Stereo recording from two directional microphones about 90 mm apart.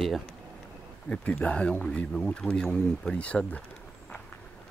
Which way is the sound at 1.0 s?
10° left (ahead or behind).